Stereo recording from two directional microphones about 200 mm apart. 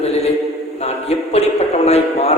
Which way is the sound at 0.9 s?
30° left (ahead or behind).